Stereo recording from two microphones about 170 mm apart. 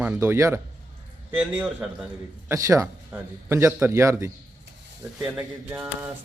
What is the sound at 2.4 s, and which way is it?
Speech, 20° right (ahead or behind).